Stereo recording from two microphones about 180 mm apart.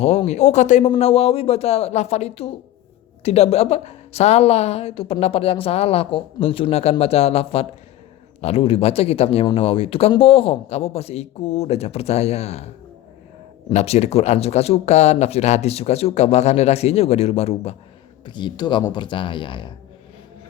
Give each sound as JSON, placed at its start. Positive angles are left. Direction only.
{"t": 0.0, "sound": "a woman's voice", "side_deg": 35}